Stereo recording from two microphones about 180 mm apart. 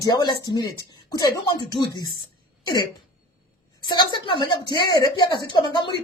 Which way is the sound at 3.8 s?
25° left (ahead or behind).